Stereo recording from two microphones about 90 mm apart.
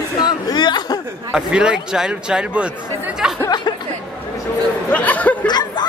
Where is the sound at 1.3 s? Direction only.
10° right (ahead or behind).